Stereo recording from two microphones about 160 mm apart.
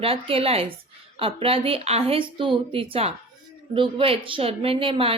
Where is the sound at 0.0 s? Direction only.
35° right (ahead or behind).